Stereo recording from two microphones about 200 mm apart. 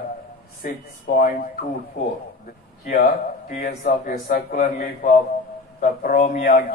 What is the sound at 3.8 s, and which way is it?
A man's voice, 40° left (ahead or behind).